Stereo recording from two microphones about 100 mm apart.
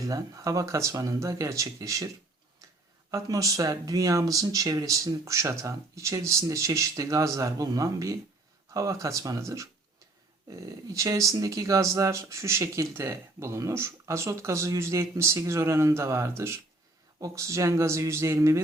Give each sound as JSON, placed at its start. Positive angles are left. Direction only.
{"t": 0.1, "sound": "speech", "side_deg": -35}
{"t": 3.1, "sound": "speech", "side_deg": -35}